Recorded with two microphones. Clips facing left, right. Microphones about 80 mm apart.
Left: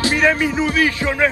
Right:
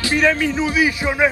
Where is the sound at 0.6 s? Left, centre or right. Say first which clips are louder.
Even; centre.